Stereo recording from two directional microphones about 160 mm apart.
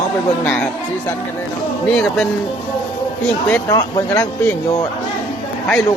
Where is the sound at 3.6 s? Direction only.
20° left (ahead or behind).